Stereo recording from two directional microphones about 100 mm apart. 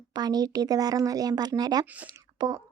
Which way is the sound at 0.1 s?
45° right (ahead or behind).